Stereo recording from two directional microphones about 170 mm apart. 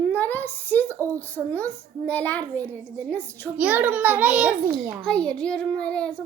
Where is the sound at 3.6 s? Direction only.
10° right (ahead or behind).